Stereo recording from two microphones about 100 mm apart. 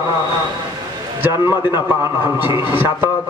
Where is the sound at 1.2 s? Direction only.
25° right (ahead or behind).